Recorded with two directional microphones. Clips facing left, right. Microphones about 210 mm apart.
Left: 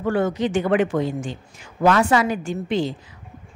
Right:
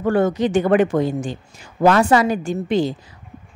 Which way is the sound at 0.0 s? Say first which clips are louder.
Right 3 dB; 40° right (ahead or behind).